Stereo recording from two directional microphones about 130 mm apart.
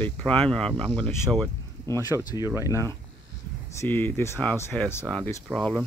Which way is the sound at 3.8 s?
20° left (ahead or behind).